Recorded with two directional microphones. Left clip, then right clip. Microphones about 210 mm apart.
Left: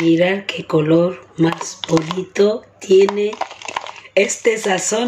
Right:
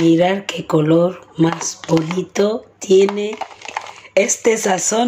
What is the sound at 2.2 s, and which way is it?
Speech, 15° right (ahead or behind).